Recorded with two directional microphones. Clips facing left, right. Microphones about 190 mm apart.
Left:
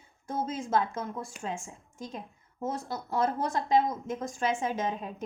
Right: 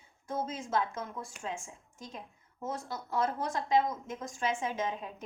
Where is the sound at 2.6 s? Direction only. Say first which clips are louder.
Left 4 dB; 35° left (ahead or behind).